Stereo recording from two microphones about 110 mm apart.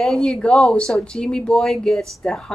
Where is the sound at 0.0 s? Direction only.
5° left (ahead or behind).